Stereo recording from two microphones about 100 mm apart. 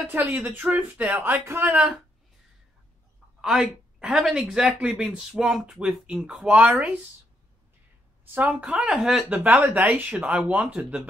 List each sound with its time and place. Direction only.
0.0 s speech: 20° right (ahead or behind)
3.3 s speech: 5° right (ahead or behind)
8.4 s speech: 15° right (ahead or behind)
9.4 s speech: 15° right (ahead or behind)